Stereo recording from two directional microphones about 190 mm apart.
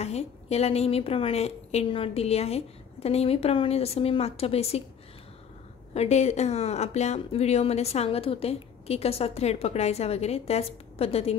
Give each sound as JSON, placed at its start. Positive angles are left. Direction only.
{"t": 0.0, "sound": "a woman's voice", "side_deg": 35}
{"t": 5.9, "sound": "a woman's voice", "side_deg": 35}